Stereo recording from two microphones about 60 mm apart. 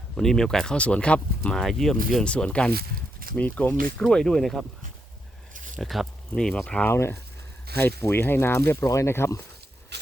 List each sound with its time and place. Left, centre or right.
0.2 s speech: centre
1.5 s speech: centre
2.2 s speech: centre
4.0 s speech: centre
5.8 s speech: centre
6.3 s speech: centre
6.8 s speech: left